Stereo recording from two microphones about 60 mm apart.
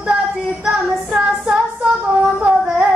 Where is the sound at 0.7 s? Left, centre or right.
Centre.